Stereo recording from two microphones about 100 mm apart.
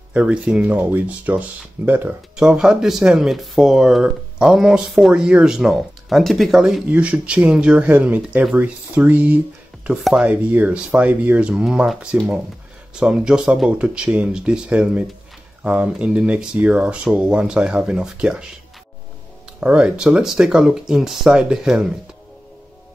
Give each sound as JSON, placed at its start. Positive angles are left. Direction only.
{"t": 0.1, "sound": "speech", "side_deg": -10}
{"t": 2.3, "sound": "speech", "side_deg": -5}
{"t": 19.6, "sound": "speech", "side_deg": -10}